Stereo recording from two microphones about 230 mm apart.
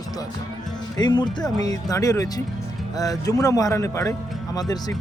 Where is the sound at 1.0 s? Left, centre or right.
Centre.